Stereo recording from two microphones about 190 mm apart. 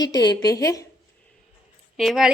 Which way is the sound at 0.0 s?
20° left (ahead or behind).